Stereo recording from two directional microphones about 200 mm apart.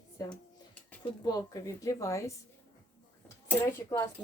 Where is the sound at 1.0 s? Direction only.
20° left (ahead or behind).